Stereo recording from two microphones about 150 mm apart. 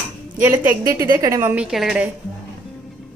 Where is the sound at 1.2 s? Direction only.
20° right (ahead or behind).